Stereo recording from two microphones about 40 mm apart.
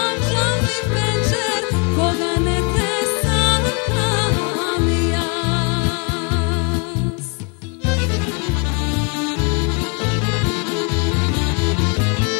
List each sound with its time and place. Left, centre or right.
0.0 s music: left